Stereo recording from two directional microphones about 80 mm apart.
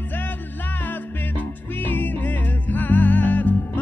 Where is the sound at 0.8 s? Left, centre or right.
Left.